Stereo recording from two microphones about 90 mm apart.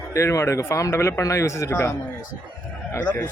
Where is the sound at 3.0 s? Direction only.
15° left (ahead or behind).